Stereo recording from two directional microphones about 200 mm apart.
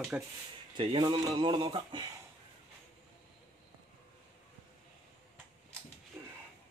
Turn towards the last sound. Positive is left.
turn(degrees=-10)  # may be behind; listen again after turning